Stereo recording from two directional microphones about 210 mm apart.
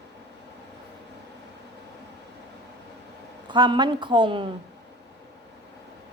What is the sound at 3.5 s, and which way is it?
Speech, 20° right (ahead or behind).